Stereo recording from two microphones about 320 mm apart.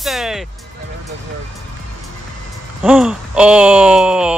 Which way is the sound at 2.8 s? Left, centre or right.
Centre.